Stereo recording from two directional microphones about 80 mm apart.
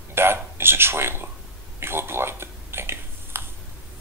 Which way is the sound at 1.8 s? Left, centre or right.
Right.